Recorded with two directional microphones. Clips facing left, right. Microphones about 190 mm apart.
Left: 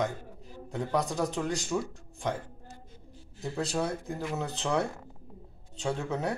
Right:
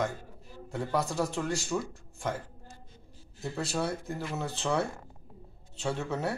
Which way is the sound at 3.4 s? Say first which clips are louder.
Left 1 dB; 5° right (ahead or behind).